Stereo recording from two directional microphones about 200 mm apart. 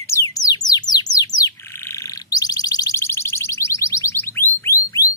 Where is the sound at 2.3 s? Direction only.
20° left (ahead or behind).